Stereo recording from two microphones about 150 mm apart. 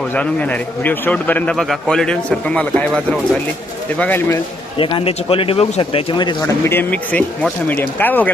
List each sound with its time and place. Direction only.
0.1 s speech: 10° left (ahead or behind)
4.8 s a man's voice: 35° left (ahead or behind)
6.7 s speech: 10° left (ahead or behind)